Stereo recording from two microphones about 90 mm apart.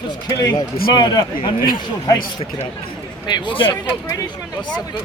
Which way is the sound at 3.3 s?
60° left (ahead or behind).